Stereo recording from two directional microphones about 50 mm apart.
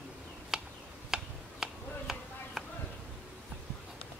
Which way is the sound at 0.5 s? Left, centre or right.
Centre.